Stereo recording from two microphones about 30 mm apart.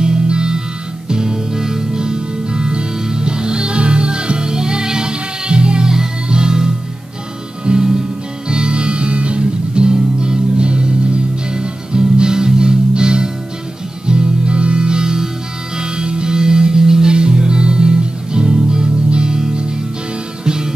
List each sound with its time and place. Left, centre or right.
0.0 s music: right
17.1 s music: right